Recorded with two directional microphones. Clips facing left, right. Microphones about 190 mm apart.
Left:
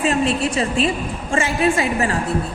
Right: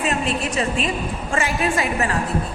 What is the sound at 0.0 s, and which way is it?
A woman's voice, 30° left (ahead or behind).